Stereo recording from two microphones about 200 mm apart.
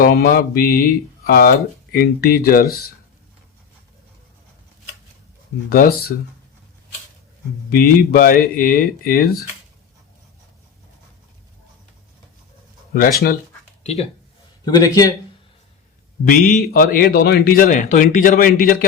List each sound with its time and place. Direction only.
0.0 s speech: 50° left (ahead or behind)
5.6 s speech: 45° left (ahead or behind)
7.7 s speech: 45° left (ahead or behind)
12.9 s speech: 45° left (ahead or behind)
13.8 s speech: 30° left (ahead or behind)
14.6 s speech: 20° left (ahead or behind)
16.2 s speech: 45° left (ahead or behind)